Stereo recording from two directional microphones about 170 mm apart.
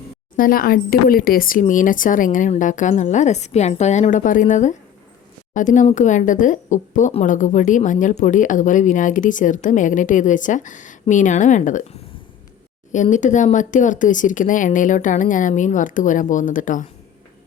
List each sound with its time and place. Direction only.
0.3 s speech: 55° left (ahead or behind)
12.9 s speech: 45° left (ahead or behind)